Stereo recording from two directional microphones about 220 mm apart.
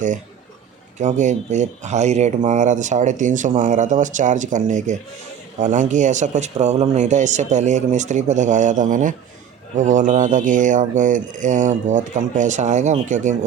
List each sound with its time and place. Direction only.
0.9 s speech: 35° right (ahead or behind)